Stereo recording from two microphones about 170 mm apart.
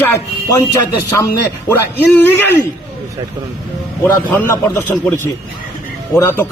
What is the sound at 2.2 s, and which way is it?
Speech, 10° left (ahead or behind).